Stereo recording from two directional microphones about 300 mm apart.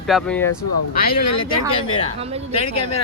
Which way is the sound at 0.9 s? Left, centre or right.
Left.